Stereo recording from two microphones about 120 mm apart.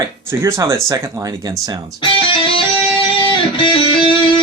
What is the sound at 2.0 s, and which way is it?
Music, 45° left (ahead or behind).